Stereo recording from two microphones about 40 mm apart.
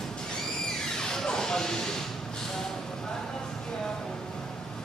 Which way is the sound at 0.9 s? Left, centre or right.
Centre.